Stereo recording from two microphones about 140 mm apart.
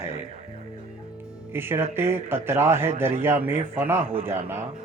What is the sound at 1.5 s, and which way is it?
Speech, 15° right (ahead or behind).